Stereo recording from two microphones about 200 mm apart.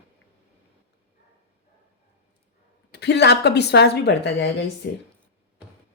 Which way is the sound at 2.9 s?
60° left (ahead or behind).